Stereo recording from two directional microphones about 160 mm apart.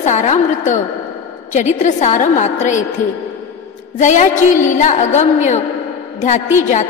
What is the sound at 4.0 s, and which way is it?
A woman's voice, 50° left (ahead or behind).